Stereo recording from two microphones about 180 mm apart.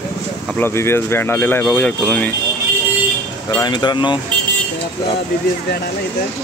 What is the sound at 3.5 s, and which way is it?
Speech, 25° left (ahead or behind).